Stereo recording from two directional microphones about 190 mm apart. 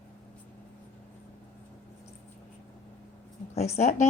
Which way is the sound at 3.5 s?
35° left (ahead or behind).